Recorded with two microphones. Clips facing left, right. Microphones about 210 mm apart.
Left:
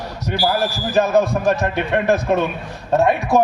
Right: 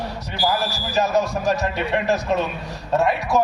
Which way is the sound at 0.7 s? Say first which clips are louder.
Left 5 dB; 55° left (ahead or behind).